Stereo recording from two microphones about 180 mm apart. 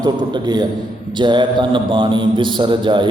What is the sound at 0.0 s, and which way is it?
A man's voice, 25° right (ahead or behind).